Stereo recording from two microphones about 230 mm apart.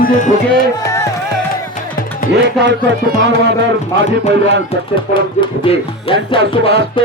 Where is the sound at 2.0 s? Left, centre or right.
Left.